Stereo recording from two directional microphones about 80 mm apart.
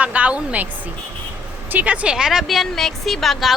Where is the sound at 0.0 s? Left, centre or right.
Centre.